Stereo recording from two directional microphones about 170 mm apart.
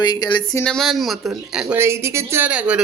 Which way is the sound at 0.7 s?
Centre (ahead or behind).